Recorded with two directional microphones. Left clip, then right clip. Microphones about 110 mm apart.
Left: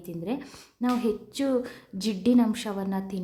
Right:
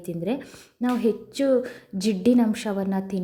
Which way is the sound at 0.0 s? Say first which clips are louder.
Right 5 dB; 35° right (ahead or behind).